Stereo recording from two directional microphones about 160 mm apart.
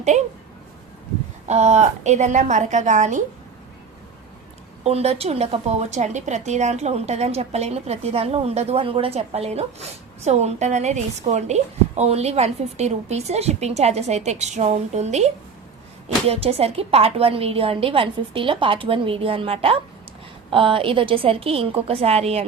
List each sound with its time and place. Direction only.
1.5 s a woman's voice: 45° right (ahead or behind)
4.8 s a woman's voice: 40° right (ahead or behind)
16.3 s a woman's voice: 40° right (ahead or behind)